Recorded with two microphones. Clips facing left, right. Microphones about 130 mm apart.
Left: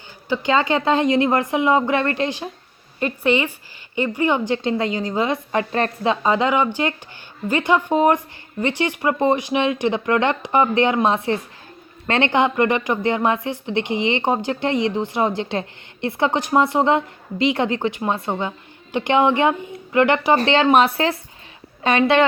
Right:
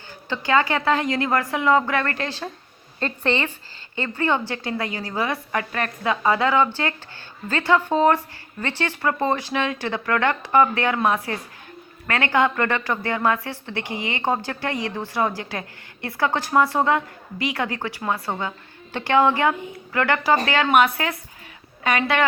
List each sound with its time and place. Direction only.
0.3 s a woman's voice: 20° left (ahead or behind)